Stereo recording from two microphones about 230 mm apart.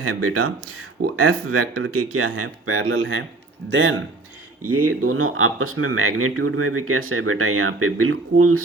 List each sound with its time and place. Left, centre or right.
0.0 s speech: right
4.9 s speech: right